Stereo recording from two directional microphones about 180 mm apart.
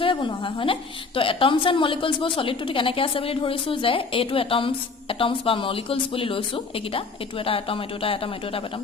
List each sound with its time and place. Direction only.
0.0 s a woman's voice: 30° left (ahead or behind)